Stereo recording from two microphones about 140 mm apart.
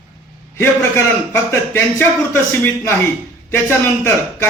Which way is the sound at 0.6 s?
15° left (ahead or behind).